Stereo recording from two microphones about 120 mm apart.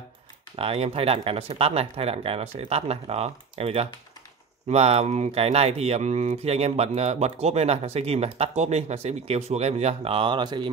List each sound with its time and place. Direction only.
0.6 s speech: 55° right (ahead or behind); by 10.7 s 40° right (ahead or behind)